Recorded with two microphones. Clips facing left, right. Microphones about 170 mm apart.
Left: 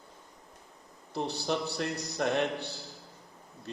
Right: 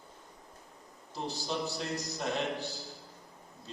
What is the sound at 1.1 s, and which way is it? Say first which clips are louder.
A man's voice: left 4 dB; 65° left (ahead or behind).